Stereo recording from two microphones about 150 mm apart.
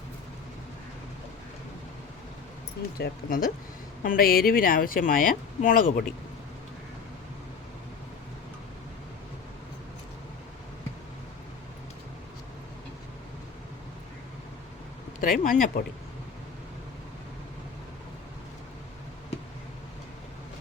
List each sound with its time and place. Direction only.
3.0 s speech: 70° left (ahead or behind)
15.2 s speech: 65° left (ahead or behind)